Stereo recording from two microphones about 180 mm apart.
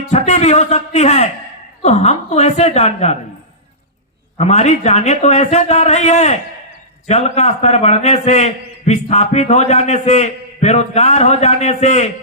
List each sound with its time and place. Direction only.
0.1 s a man's voice: 40° left (ahead or behind)
4.4 s a man's voice: 35° left (ahead or behind)